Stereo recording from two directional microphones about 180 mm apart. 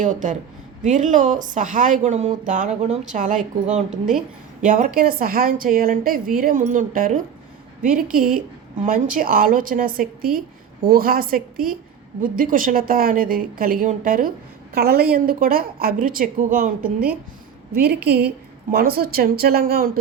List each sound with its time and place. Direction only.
0.0 s a woman's voice: 45° right (ahead or behind)
3.8 s a woman's voice: 5° right (ahead or behind)
4.6 s a woman's voice: 50° right (ahead or behind)
16.8 s a woman's voice: 10° right (ahead or behind)
17.7 s speech: 60° right (ahead or behind)